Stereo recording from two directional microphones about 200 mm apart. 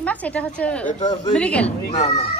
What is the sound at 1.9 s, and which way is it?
Speech, 30° left (ahead or behind).